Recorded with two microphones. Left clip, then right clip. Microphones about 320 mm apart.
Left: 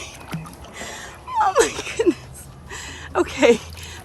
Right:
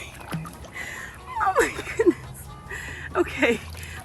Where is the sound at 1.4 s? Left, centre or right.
Centre.